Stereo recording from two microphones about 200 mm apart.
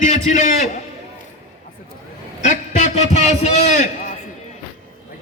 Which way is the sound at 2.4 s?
35° left (ahead or behind).